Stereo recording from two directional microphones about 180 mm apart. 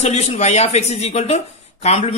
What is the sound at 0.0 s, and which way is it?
Speech, 40° left (ahead or behind).